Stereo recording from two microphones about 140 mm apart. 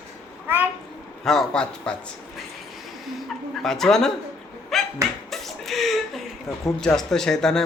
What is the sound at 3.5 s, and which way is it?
Speech, 5° left (ahead or behind).